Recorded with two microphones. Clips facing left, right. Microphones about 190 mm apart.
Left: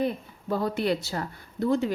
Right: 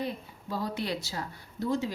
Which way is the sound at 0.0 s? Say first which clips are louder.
Left 7 dB; 55° left (ahead or behind).